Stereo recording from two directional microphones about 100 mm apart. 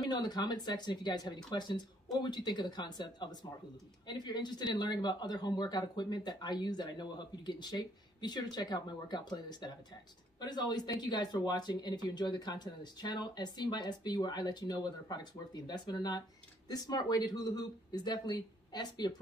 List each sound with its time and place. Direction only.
0.0 s speech: 40° left (ahead or behind)